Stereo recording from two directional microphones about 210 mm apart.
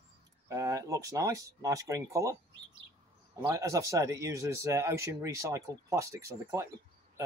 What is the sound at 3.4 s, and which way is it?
Speech, 15° right (ahead or behind).